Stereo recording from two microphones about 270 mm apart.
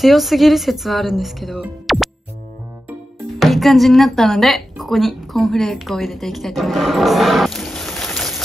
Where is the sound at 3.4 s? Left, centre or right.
Centre.